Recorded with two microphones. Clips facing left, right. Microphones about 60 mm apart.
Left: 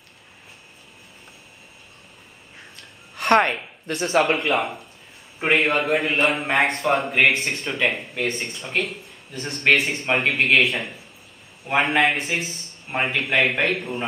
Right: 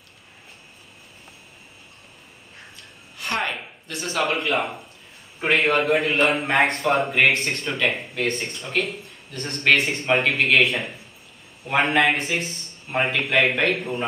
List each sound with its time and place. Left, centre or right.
2.7 s a sound: left
4.2 s speech: centre
5.4 s a man's voice: centre
5.7 s speech: centre